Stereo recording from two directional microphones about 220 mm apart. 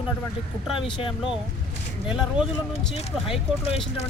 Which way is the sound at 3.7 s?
25° left (ahead or behind).